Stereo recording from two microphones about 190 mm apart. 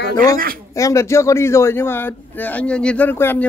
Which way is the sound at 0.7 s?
15° left (ahead or behind).